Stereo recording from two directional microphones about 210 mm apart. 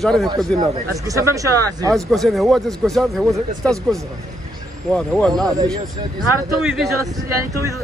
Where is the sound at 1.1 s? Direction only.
15° right (ahead or behind).